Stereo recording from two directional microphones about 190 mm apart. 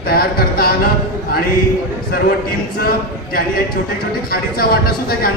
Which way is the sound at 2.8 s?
50° left (ahead or behind).